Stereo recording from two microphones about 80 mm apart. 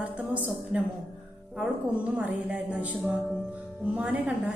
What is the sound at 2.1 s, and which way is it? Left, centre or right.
A woman's voice, centre.